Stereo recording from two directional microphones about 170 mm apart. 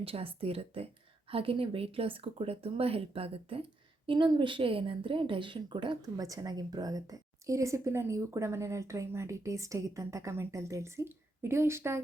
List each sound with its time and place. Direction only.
0.0 s speech: 35° right (ahead or behind); by 12.0 s 15° right (ahead or behind)